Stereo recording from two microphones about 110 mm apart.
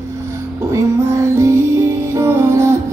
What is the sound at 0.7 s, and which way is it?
Music, 25° right (ahead or behind).